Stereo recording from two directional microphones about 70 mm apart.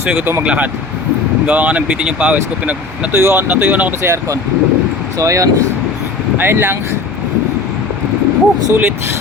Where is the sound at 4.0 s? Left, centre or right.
Right.